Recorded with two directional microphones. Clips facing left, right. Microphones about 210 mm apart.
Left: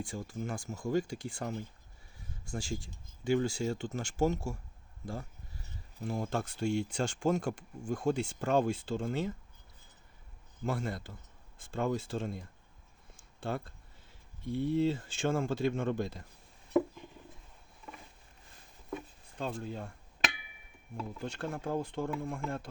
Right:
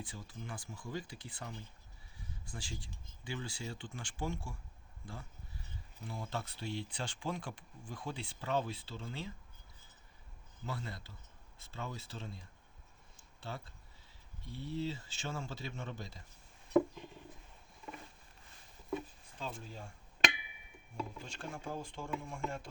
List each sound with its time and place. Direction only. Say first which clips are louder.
0.0 s speech: left 9 dB; 45° left (ahead or behind)
6.1 s speech: left 8 dB; 50° left (ahead or behind)
10.6 s speech: left 9 dB; 50° left (ahead or behind)
13.4 s speech: left 9 dB; 55° left (ahead or behind)
19.4 s speech: left 8 dB; 60° left (ahead or behind)
20.9 s speech: left 5 dB; 60° left (ahead or behind)